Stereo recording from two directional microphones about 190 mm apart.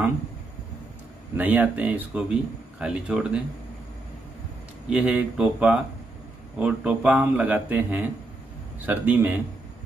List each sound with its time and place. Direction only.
1.3 s speech: 10° right (ahead or behind)
4.8 s speech: 5° right (ahead or behind)